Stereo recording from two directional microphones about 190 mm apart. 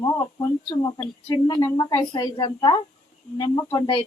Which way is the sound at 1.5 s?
20° left (ahead or behind).